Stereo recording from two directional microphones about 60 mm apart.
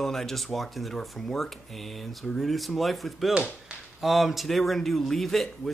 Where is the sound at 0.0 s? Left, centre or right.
Centre.